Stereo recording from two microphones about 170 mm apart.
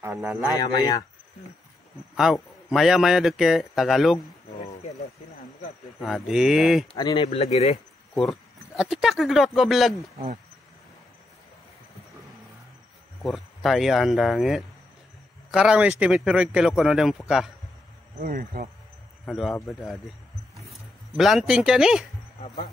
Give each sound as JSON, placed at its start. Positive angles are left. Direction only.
{"t": 0.6, "sound": "speech", "side_deg": 20}
{"t": 2.1, "sound": "a man's voice", "side_deg": 0}
{"t": 5.9, "sound": "a man's voice", "side_deg": 0}
{"t": 7.3, "sound": "speech", "side_deg": 35}
{"t": 8.1, "sound": "speech", "side_deg": 0}
{"t": 10.1, "sound": "speech", "side_deg": -45}
{"t": 13.2, "sound": "a man's voice", "side_deg": 0}
{"t": 18.2, "sound": "speech", "side_deg": -55}
{"t": 19.2, "sound": "a man's voice", "side_deg": 0}
{"t": 21.2, "sound": "a man's voice", "side_deg": 0}